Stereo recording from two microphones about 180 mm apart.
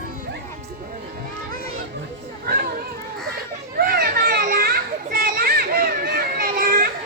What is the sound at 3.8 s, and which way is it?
Children playing, 55° right (ahead or behind).